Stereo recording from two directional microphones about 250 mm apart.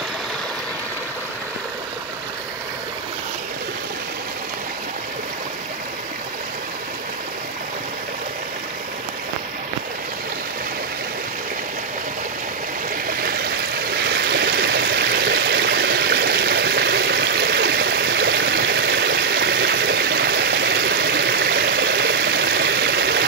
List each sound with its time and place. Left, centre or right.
13.2 s stream: right